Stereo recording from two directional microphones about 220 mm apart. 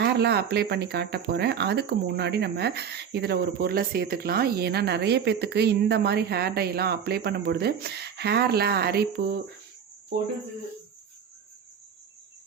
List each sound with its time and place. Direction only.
0.0 s speech: 50° right (ahead or behind)